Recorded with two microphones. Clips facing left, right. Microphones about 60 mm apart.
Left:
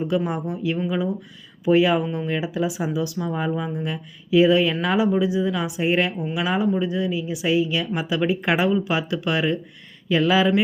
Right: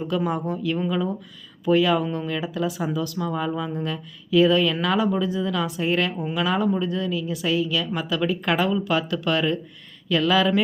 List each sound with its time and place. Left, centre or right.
0.3 s a woman's voice: centre